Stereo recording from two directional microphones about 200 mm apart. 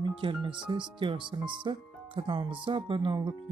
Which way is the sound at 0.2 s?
25° right (ahead or behind).